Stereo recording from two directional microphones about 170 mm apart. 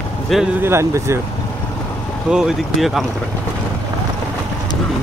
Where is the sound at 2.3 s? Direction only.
5° right (ahead or behind).